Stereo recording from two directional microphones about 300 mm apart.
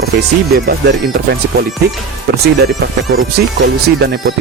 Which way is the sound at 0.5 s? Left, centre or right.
Right.